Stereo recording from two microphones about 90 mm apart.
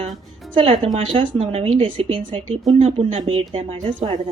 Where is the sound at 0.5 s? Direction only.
70° right (ahead or behind); by 3.8 s 90° right.